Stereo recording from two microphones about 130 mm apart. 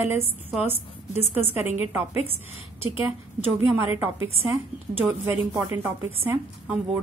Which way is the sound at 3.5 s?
15° right (ahead or behind).